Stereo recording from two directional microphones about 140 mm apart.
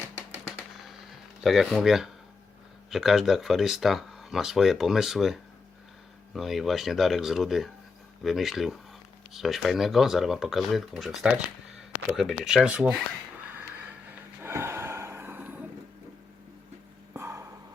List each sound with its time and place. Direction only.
1.5 s speech: centre (ahead or behind)
13.5 s music: 15° right (ahead or behind)
14.4 s gasp: 15° right (ahead or behind)
17.2 s a sound: 20° right (ahead or behind)